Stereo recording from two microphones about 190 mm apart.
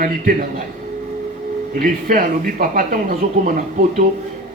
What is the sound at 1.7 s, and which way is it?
Speech, 45° right (ahead or behind).